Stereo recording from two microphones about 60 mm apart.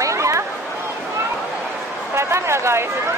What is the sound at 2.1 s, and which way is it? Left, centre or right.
Speech, right.